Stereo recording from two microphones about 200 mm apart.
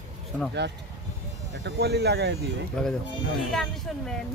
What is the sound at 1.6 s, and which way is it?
Speech, 60° right (ahead or behind).